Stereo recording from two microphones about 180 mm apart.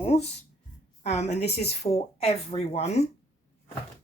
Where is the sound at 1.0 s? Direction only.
35° left (ahead or behind).